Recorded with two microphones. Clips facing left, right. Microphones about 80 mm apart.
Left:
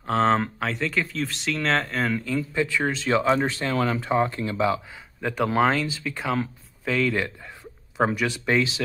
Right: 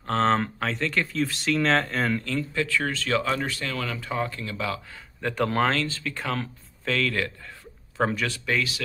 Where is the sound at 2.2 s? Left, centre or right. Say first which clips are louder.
Left 2 dB; centre.